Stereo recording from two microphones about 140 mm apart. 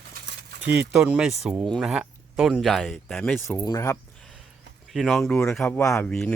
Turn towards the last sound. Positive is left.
turn(degrees=5)  # may be behind; listen again after turning